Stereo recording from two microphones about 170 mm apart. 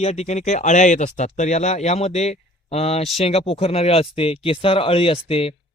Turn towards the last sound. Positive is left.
turn(degrees=35)  # may be behind; listen again after turning